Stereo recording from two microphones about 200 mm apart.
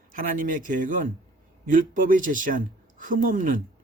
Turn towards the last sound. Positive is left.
turn(degrees=-40)  # may be behind; listen again after turning